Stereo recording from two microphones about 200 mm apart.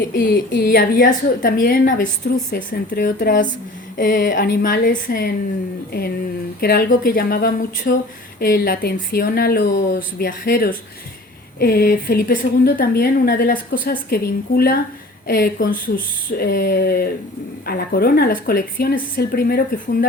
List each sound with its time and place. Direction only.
0.1 s a woman's voice: 55° left (ahead or behind)
6.6 s a woman's voice: 50° left (ahead or behind)